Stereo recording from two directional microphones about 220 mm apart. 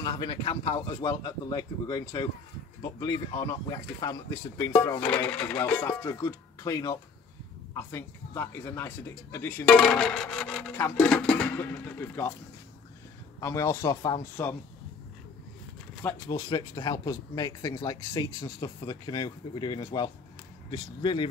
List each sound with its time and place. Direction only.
0.0 s a man's voice: 20° left (ahead or behind)
13.4 s a man's voice: 15° left (ahead or behind)
16.0 s a man's voice: 10° left (ahead or behind)